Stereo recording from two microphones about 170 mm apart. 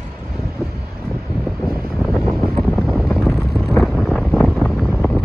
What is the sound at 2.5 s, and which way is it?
Wind noise, centre (ahead or behind).